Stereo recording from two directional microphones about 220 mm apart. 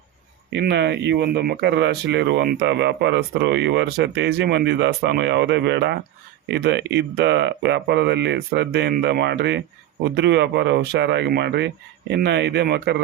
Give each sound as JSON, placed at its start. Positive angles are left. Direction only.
{"t": 0.5, "sound": "speech", "side_deg": -50}